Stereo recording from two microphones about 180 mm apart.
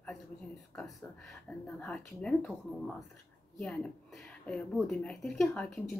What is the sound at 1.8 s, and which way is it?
Speech, 5° left (ahead or behind).